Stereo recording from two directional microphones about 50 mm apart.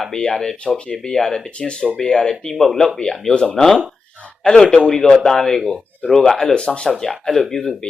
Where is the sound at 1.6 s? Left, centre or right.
Centre.